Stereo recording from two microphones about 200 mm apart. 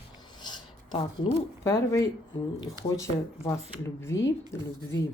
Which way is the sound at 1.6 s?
15° left (ahead or behind).